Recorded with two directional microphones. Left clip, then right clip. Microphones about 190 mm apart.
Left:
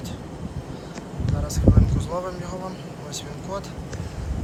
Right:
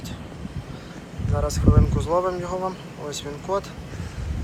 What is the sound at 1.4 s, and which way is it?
Speech, centre (ahead or behind).